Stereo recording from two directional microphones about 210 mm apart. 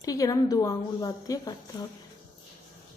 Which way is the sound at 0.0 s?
15° left (ahead or behind).